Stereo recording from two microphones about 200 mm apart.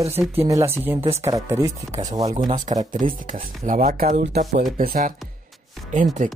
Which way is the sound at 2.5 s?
35° right (ahead or behind).